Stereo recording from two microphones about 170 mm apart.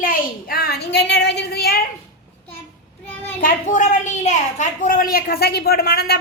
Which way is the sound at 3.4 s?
50° left (ahead or behind).